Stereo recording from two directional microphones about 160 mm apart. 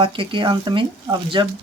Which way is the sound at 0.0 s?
35° right (ahead or behind).